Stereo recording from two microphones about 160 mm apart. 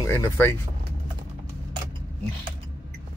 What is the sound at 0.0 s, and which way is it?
Speech, 15° left (ahead or behind).